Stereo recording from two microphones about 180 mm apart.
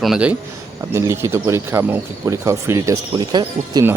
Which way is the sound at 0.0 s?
5° right (ahead or behind).